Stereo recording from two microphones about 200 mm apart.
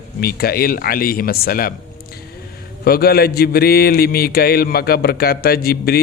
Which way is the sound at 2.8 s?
50° left (ahead or behind).